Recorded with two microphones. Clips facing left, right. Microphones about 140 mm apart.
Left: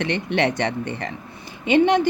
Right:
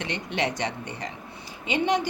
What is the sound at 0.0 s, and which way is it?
Speech, 60° left (ahead or behind).